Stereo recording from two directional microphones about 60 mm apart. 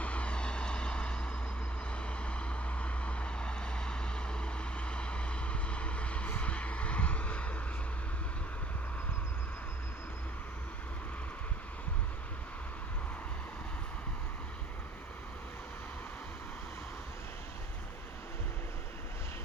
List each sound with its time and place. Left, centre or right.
0.0 s vehicle: left